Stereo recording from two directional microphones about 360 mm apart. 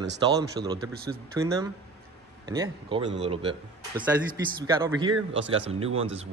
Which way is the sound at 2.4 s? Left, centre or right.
Centre.